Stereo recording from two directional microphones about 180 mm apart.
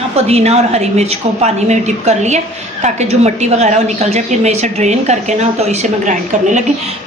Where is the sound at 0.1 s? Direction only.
35° right (ahead or behind).